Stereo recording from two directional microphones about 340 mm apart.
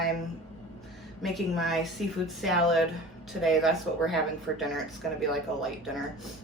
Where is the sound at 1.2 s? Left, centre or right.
Centre.